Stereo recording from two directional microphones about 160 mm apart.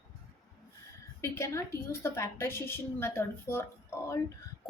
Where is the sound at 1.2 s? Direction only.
20° left (ahead or behind).